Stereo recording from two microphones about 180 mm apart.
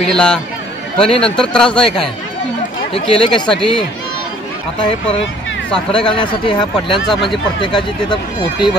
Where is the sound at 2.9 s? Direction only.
30° left (ahead or behind).